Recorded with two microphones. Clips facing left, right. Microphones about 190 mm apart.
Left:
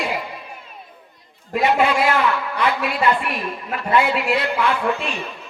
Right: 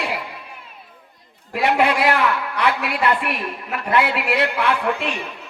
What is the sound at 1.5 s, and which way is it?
A woman's voice, 65° right (ahead or behind).